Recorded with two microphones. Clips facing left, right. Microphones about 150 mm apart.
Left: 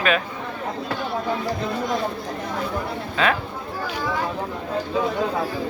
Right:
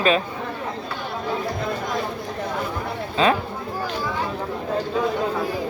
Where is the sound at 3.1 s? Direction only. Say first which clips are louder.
Right 3 dB; 25° right (ahead or behind).